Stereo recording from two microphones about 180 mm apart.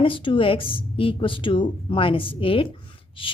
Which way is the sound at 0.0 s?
30° left (ahead or behind).